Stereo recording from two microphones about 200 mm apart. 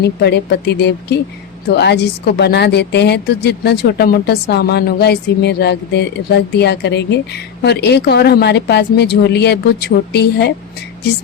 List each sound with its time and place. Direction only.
0.0 s a woman's voice: 55° left (ahead or behind)